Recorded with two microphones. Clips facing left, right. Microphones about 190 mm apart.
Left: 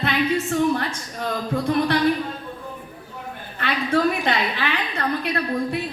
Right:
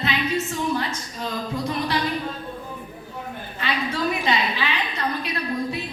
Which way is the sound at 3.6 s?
55° left (ahead or behind).